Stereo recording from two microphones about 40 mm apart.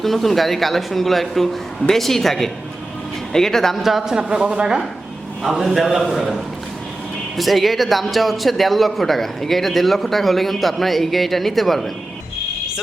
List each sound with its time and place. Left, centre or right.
0.0 s a man's voice: centre
3.8 s a man's voice: centre
5.4 s a man's voice: centre
7.3 s a man's voice: centre